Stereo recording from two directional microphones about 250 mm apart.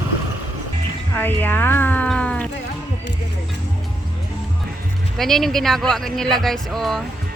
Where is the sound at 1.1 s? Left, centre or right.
Centre.